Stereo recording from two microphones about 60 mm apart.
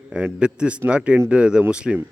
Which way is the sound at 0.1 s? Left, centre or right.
Centre.